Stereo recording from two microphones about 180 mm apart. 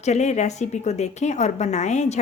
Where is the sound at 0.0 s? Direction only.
40° left (ahead or behind).